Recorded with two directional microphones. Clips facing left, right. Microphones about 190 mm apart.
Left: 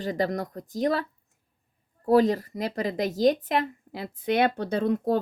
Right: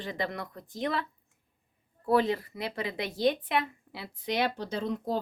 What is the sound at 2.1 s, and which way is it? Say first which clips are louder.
Speech: left 6 dB; 40° left (ahead or behind).